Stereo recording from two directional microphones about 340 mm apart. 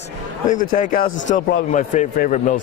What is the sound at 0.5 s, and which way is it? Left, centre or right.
A man's voice, left.